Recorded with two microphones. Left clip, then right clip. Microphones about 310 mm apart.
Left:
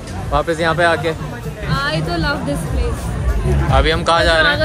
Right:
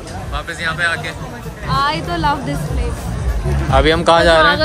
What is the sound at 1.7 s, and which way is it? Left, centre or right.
Music, right.